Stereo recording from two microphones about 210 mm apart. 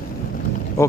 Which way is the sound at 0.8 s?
15° left (ahead or behind).